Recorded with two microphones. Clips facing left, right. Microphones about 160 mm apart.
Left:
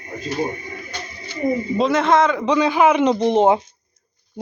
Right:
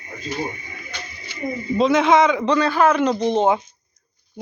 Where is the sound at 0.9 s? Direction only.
50° left (ahead or behind).